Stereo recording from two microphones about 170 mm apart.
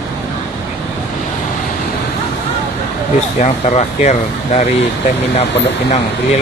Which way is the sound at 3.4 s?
45° left (ahead or behind).